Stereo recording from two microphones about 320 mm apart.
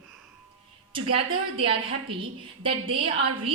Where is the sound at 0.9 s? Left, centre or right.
Centre.